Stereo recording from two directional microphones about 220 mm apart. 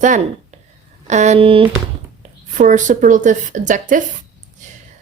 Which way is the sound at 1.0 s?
30° right (ahead or behind).